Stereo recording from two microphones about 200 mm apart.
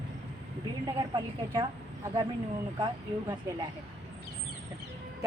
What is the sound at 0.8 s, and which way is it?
Speech, 20° right (ahead or behind).